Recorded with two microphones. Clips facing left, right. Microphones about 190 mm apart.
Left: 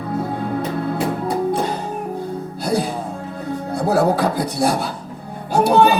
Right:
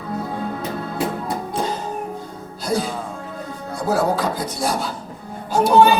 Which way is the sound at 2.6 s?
60° left (ahead or behind).